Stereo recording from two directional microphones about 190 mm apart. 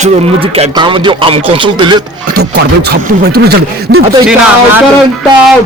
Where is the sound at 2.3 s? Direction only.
55° right (ahead or behind).